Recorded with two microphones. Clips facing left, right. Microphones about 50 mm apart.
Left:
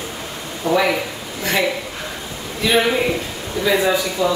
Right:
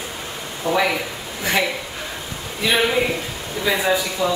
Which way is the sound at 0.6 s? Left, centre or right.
Left.